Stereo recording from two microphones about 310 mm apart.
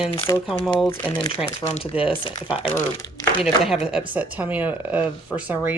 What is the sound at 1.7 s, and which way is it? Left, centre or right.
Speech, centre.